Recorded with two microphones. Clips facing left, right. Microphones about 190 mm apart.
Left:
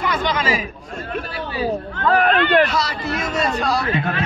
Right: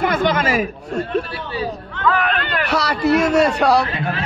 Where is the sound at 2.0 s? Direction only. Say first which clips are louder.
Left 1 dB; 40° left (ahead or behind).